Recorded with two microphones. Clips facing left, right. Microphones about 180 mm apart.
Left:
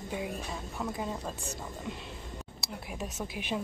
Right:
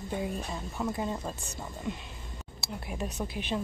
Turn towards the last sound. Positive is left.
turn(degrees=5)  # may be behind; listen again after turning